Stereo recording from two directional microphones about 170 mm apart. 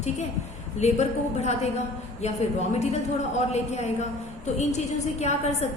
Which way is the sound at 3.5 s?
40° left (ahead or behind).